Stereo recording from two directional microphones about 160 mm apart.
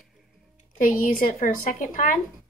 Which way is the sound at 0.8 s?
55° left (ahead or behind).